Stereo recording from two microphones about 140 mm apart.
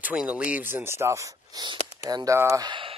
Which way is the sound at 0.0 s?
10° right (ahead or behind).